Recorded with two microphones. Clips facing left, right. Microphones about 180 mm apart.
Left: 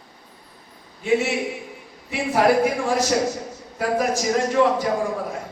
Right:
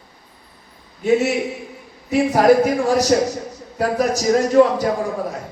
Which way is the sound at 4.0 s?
40° right (ahead or behind).